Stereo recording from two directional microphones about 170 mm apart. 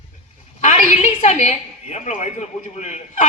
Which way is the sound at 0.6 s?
45° left (ahead or behind).